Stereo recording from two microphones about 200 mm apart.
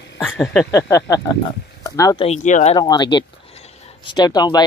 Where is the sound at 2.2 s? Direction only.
35° left (ahead or behind).